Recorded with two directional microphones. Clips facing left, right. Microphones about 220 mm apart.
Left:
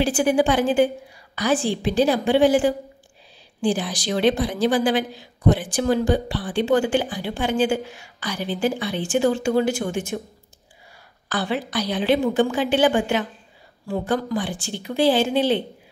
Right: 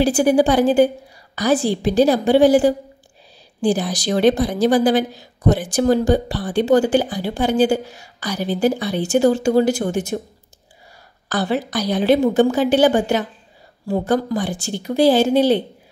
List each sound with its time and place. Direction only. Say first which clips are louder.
0.0 s a woman's voice: right 4 dB; 40° right (ahead or behind)
11.2 s a woman's voice: right 4 dB; 40° right (ahead or behind)